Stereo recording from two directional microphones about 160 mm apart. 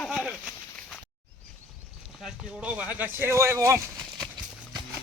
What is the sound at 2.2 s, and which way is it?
Speech, 5° right (ahead or behind).